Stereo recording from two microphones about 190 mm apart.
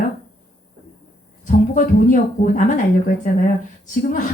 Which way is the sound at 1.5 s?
45° left (ahead or behind).